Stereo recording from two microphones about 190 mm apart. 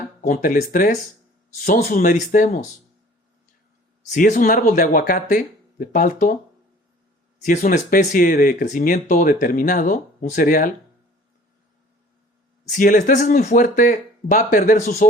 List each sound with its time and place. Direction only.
0.2 s speech: 45° left (ahead or behind)
4.1 s speech: 45° left (ahead or behind)
7.3 s speech: 40° left (ahead or behind)
12.7 s speech: 45° left (ahead or behind)